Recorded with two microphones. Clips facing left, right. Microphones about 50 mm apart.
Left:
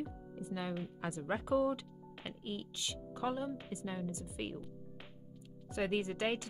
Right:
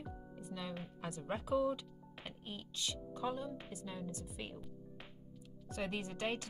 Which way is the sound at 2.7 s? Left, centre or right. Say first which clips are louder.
Even; left.